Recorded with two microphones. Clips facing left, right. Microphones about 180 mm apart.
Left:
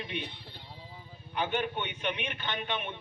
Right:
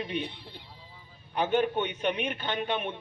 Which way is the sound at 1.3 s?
45° right (ahead or behind).